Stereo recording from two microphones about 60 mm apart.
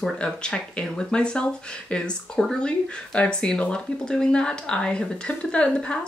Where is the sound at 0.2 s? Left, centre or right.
Centre.